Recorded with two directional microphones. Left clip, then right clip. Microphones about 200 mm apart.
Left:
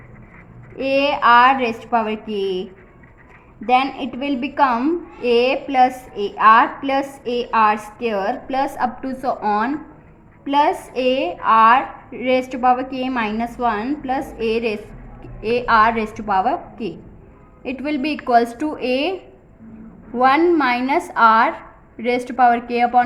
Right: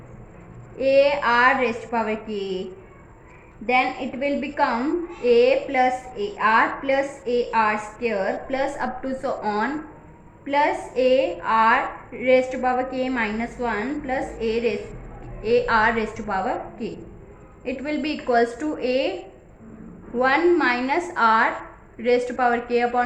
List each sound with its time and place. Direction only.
0.8 s a woman's voice: 40° left (ahead or behind)
3.7 s a woman's voice: 40° left (ahead or behind)
20.1 s a woman's voice: 40° left (ahead or behind)